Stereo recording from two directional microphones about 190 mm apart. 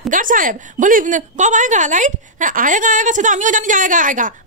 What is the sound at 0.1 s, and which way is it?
A woman's voice, 45° right (ahead or behind).